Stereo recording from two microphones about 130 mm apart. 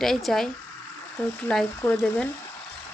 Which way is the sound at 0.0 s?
Centre (ahead or behind).